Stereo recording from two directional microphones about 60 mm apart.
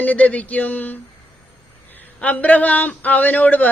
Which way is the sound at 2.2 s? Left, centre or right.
Left.